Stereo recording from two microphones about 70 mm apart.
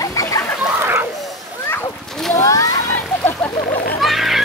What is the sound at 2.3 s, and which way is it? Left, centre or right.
Speech, left.